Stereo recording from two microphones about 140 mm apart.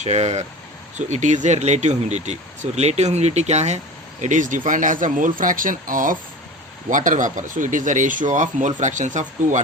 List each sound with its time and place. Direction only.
0.0 s speech: 50° right (ahead or behind)
4.2 s speech: 65° right (ahead or behind)